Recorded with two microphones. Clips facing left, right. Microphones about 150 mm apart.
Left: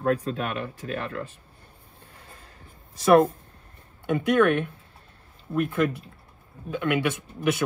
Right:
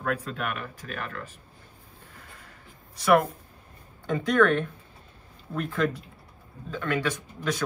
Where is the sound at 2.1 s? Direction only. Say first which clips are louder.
Left 1 dB; 30° left (ahead or behind).